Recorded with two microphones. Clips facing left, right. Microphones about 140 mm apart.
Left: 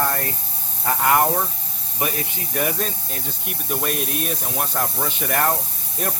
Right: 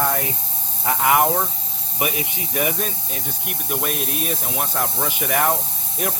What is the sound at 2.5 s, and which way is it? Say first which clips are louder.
Speech: even; 5° right (ahead or behind).